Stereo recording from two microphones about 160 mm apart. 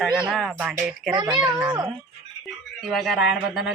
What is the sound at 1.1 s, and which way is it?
Speech, 30° right (ahead or behind).